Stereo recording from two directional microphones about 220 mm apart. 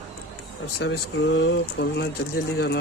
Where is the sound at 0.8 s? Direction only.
55° left (ahead or behind).